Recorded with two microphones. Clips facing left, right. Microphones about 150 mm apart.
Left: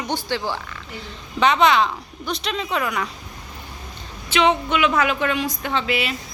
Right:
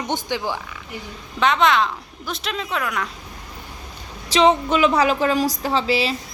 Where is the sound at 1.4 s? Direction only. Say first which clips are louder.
Left 1 dB; centre (ahead or behind).